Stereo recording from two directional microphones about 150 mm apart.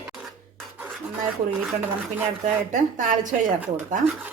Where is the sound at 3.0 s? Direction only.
60° right (ahead or behind).